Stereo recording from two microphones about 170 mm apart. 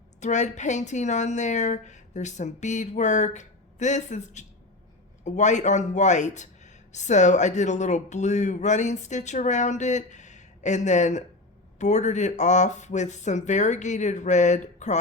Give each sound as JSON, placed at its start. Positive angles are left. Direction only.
{"t": 0.2, "sound": "speech", "side_deg": 45}